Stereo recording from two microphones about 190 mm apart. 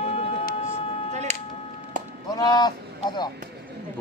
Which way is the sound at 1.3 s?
40° right (ahead or behind).